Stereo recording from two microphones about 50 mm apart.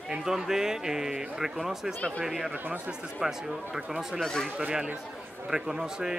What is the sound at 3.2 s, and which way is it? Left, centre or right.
Speech, centre.